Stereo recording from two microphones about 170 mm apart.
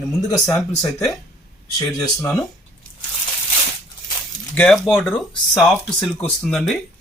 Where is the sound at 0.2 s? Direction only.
20° left (ahead or behind).